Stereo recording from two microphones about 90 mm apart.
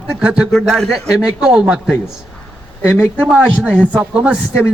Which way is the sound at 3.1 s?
10° right (ahead or behind).